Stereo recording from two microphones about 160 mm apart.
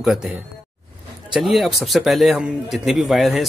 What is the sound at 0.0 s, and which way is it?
Speech, centre (ahead or behind).